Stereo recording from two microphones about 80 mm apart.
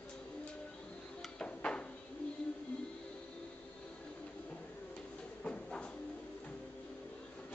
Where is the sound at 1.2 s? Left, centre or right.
Centre.